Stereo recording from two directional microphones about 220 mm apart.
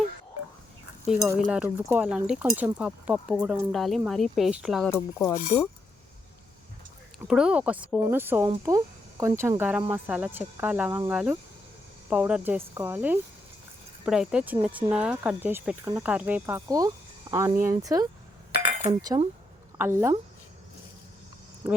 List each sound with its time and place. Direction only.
1.0 s speech: 5° right (ahead or behind)
4.9 s speech: 15° left (ahead or behind)
7.3 s speech: 5° right (ahead or behind)
18.5 s chink: 20° right (ahead or behind)
19.8 s speech: 10° right (ahead or behind)